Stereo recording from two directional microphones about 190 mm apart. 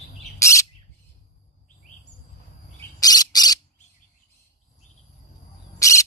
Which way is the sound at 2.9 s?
20° left (ahead or behind).